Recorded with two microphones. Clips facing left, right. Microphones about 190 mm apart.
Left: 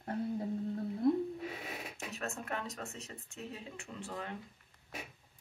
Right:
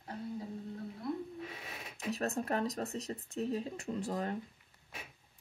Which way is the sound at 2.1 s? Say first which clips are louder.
Right 7 dB; 35° right (ahead or behind).